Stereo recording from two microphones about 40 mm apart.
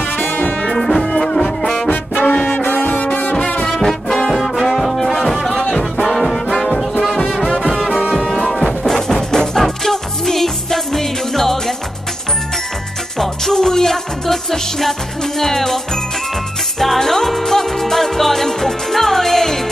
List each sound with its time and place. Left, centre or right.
0.2 s brass instrument: left
0.7 s brass instrument: centre
1.9 s brass instrument: left
2.4 s music: left
3.3 s music: left
3.8 s brass instrument: centre
4.4 s brass instrument: centre
4.7 s music: centre
6.1 s brass instrument: centre
7.9 s music: right
8.2 s music: centre
13.2 s music: centre
16.8 s music: centre